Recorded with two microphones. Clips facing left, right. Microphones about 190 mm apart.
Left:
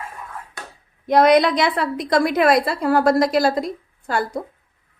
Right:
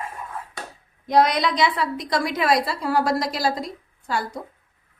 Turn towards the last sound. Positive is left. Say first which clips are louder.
# left 3 dB
turn(degrees=55)  # may be behind; listen again after turning